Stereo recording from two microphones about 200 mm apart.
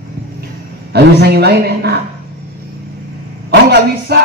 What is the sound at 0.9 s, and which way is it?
A man's voice, 50° right (ahead or behind).